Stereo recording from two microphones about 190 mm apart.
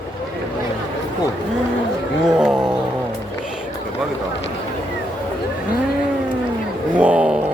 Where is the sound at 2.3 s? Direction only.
5° right (ahead or behind).